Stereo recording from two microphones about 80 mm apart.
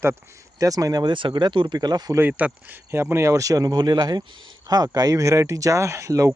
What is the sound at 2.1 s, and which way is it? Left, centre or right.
Speech, right.